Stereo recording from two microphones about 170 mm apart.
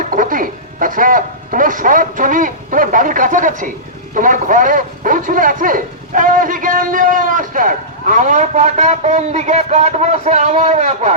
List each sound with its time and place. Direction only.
0.2 s speech: 55° right (ahead or behind)